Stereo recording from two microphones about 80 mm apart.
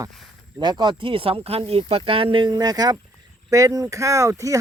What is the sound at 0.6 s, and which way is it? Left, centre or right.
Speech, right.